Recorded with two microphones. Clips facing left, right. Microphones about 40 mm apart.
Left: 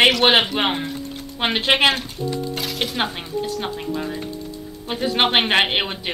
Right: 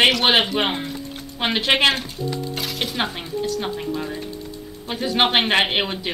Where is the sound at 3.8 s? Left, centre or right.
Centre.